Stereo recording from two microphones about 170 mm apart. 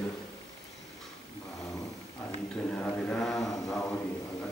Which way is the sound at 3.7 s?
5° left (ahead or behind).